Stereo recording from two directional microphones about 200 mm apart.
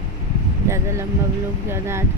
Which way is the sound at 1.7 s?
15° right (ahead or behind).